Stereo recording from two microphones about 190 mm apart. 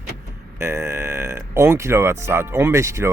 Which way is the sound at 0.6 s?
15° right (ahead or behind).